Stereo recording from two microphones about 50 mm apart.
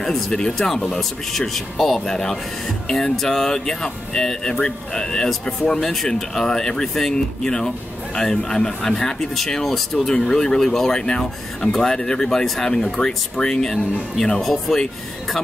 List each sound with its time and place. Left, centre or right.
0.0 s speech: centre
14.4 s speech: centre